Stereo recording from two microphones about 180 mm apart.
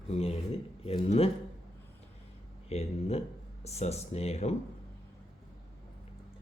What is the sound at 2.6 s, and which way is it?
Speech, 35° left (ahead or behind).